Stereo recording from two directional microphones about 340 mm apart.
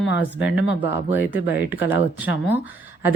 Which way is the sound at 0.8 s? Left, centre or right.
Centre.